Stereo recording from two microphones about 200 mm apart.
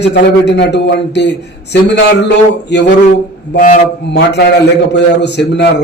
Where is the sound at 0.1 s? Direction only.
60° left (ahead or behind).